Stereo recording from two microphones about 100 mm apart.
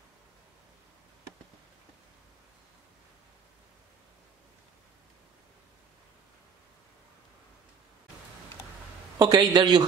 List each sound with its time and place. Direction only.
9.2 s a man's voice: 40° right (ahead or behind)
9.6 s a man's voice: 50° right (ahead or behind)